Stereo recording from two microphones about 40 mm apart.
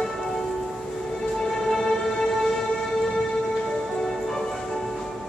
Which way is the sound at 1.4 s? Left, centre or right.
Centre.